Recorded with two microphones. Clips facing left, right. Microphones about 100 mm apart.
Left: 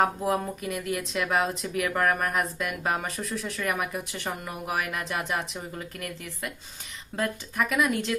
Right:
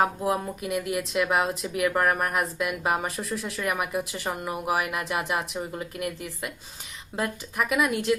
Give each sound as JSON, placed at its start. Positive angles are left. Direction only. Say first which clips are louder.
{"t": 0.0, "sound": "speech", "louder": "even", "side_deg": -5}